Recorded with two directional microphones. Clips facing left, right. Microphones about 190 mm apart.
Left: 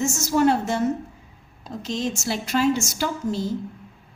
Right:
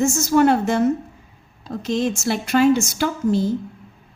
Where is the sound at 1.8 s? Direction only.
55° right (ahead or behind).